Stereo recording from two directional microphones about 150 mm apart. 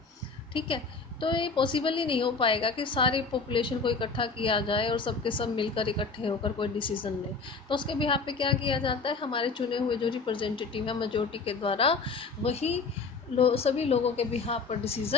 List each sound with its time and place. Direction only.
1.2 s a woman's voice: 35° left (ahead or behind)